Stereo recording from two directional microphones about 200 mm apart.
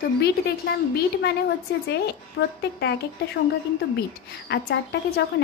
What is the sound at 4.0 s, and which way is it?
A woman's voice, 55° left (ahead or behind).